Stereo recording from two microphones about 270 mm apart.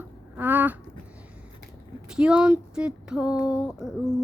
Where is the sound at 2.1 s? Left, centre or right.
Centre.